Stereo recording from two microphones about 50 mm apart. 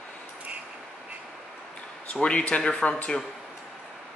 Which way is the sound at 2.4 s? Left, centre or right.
Centre.